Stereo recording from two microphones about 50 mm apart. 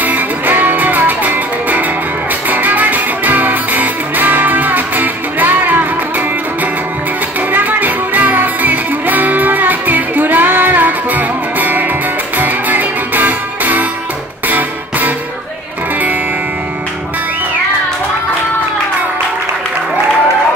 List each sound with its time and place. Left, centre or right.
0.0 s music: right
7.5 s music: right